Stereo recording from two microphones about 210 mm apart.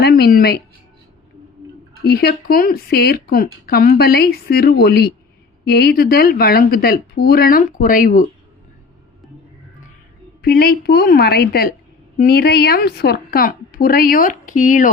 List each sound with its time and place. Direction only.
0.0 s speech: 50° left (ahead or behind)
2.0 s speech: 45° left (ahead or behind)
10.4 s speech: 45° left (ahead or behind)